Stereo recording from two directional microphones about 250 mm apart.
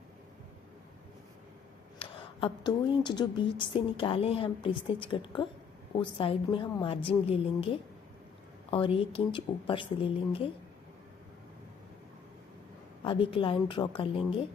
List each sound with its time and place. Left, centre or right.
2.0 s a woman's voice: left
13.1 s a woman's voice: left